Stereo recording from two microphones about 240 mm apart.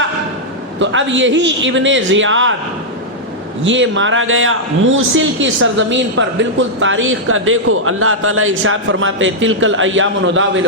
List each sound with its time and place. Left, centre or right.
0.8 s a man's voice: right
3.6 s a man's voice: right